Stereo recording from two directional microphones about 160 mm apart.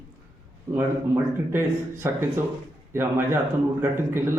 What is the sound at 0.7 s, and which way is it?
Speech, 15° right (ahead or behind).